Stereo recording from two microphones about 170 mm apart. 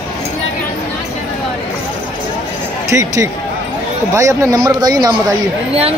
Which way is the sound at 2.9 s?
20° right (ahead or behind).